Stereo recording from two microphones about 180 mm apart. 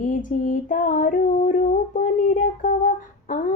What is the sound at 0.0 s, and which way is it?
Female singing, 45° left (ahead or behind).